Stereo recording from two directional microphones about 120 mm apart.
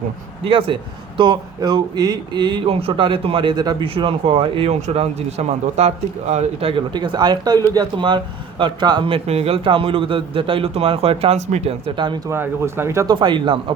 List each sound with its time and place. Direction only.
0.4 s a man's voice: 45° right (ahead or behind)
3.8 s speech: 50° right (ahead or behind); by 6.7 s 65° right (ahead or behind)
6.7 s speech: 40° right (ahead or behind)
11.9 s a man's voice: 40° right (ahead or behind)
12.3 s speech: 20° right (ahead or behind)
13.1 s a man's voice: 40° right (ahead or behind)